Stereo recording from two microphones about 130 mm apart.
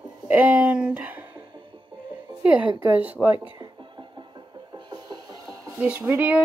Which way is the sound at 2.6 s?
40° right (ahead or behind).